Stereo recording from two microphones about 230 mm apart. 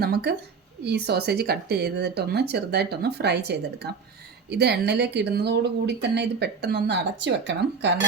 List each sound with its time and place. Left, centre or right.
0.0 s speech: right